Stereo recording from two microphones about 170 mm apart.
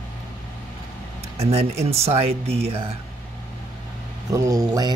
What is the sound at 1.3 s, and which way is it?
Speech, 35° right (ahead or behind).